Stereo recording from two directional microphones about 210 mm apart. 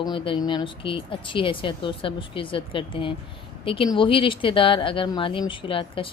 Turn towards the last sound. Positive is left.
turn(degrees=25)  # may be behind; listen again after turning